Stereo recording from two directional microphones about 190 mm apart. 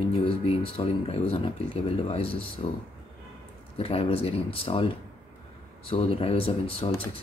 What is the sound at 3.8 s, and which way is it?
Speech, 30° left (ahead or behind).